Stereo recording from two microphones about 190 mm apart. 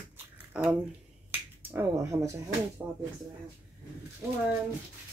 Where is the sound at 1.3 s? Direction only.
10° right (ahead or behind).